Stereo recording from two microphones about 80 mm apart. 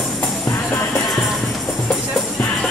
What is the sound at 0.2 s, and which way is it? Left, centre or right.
Music, left.